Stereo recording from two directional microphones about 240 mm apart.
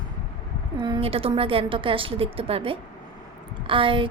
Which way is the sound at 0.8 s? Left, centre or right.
Right.